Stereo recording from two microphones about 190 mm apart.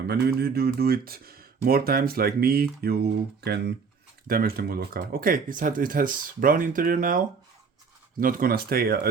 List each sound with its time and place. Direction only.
0.1 s speech: 60° right (ahead or behind)